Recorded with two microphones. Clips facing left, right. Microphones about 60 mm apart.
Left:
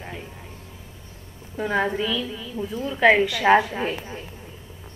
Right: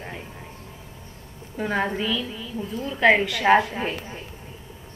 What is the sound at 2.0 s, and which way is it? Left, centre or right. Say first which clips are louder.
Speech: left 1 dB; right.